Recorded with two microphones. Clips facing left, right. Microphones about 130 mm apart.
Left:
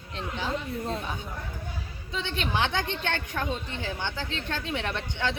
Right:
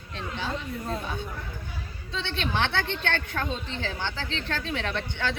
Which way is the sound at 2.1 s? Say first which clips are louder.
Even; 15° left (ahead or behind).